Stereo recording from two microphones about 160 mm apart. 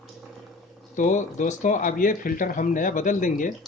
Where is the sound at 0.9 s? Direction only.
50° left (ahead or behind).